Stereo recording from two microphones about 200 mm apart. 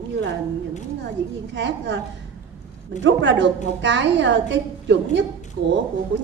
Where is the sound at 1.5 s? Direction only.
60° right (ahead or behind).